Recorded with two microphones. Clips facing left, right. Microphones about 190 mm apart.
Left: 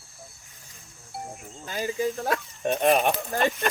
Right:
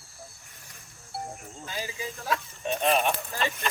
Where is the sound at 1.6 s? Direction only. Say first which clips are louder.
Left 9 dB; 50° left (ahead or behind).